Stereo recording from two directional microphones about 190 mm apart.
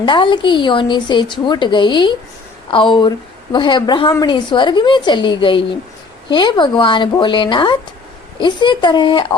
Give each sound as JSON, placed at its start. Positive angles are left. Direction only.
{"t": 0.0, "sound": "speech", "side_deg": 25}